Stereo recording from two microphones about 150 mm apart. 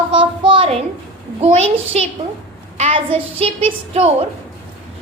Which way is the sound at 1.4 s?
45° right (ahead or behind).